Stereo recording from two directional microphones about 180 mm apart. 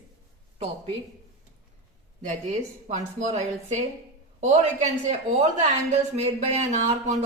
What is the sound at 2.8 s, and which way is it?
Speech, 40° right (ahead or behind).